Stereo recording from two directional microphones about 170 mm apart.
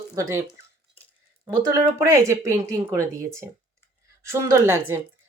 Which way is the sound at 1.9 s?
15° right (ahead or behind).